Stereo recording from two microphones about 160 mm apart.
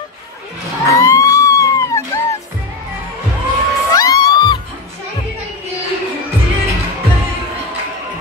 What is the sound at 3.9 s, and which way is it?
Music, 25° left (ahead or behind).